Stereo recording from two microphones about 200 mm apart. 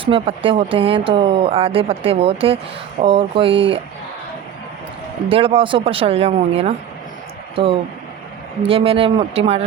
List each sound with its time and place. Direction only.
0.0 s speech: 25° right (ahead or behind)
5.3 s speech: 30° right (ahead or behind)